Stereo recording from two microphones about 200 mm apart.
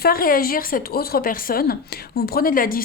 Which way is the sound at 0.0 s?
45° left (ahead or behind).